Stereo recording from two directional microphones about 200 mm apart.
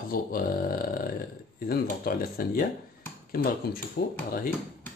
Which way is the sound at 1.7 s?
45° left (ahead or behind).